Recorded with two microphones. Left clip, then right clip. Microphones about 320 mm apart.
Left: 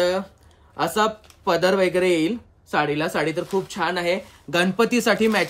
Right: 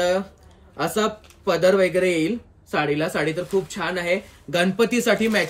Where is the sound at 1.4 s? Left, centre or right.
Centre.